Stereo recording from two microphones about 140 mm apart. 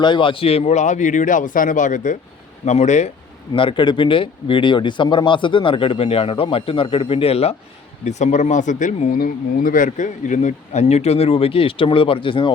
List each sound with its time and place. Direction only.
0.0 s speech: 35° left (ahead or behind); by 2.1 s 65° left (ahead or behind)
2.6 s speech: 55° left (ahead or behind)
3.5 s speech: 35° left (ahead or behind)
8.0 s speech: 55° left (ahead or behind); by 12.5 s 35° left (ahead or behind)